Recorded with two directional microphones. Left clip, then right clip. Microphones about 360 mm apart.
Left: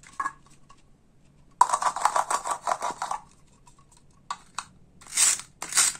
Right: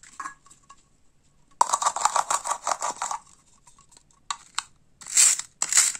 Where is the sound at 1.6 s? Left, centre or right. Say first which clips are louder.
Left 1 dB; centre.